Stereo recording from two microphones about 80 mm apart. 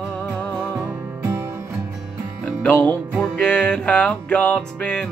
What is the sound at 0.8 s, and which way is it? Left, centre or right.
Music, right.